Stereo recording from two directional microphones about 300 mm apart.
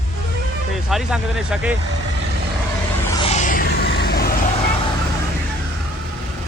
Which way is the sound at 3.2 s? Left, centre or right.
Left.